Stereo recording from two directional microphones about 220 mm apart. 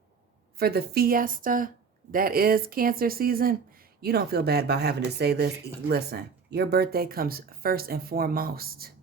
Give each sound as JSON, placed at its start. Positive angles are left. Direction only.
{"t": 0.6, "sound": "speech", "side_deg": -45}